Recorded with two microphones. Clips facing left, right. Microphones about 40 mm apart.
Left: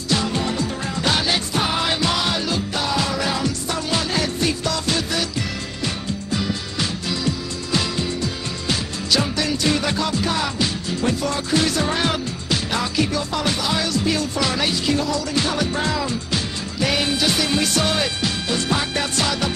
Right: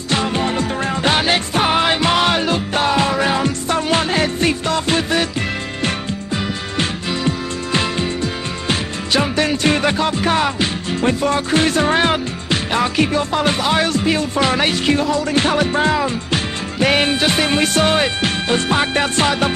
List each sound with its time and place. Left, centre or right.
0.1 s music: right
6.3 s music: right